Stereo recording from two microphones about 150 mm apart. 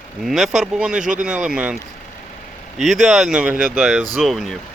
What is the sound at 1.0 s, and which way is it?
Speech, 60° right (ahead or behind).